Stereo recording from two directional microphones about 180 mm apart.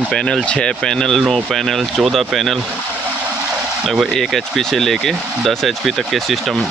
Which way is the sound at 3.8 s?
Centre (ahead or behind).